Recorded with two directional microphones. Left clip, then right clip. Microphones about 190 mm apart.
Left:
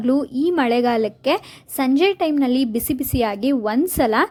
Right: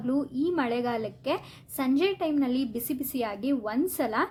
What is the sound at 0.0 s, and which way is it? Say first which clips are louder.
A woman's voice: left 9 dB; 45° left (ahead or behind).